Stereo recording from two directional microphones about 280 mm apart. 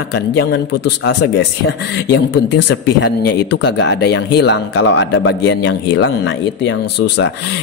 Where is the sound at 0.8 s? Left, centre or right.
Left.